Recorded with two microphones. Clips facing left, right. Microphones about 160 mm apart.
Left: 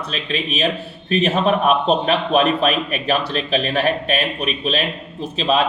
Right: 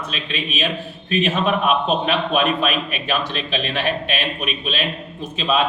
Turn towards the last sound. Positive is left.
turn(degrees=35)  # may be behind; listen again after turning